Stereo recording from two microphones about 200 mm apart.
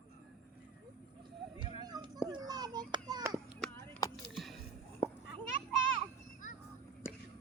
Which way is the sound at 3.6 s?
Centre (ahead or behind).